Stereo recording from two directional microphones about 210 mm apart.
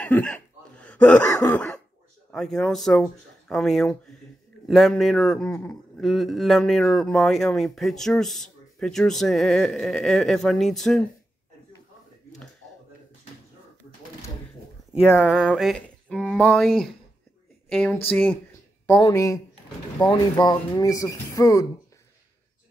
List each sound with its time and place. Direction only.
0.0 s speech: 5° left (ahead or behind)
15.2 s a sound: 5° right (ahead or behind)
17.6 s speech: 5° left (ahead or behind)
18.9 s speech: 15° left (ahead or behind)